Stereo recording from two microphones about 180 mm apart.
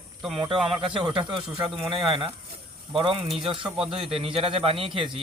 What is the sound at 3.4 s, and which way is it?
A man's voice, 30° right (ahead or behind).